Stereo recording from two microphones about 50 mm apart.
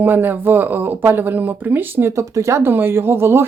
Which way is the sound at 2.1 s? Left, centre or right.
Right.